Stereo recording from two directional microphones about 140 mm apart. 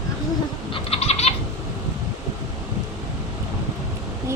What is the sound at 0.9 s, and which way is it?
Goat, 50° left (ahead or behind).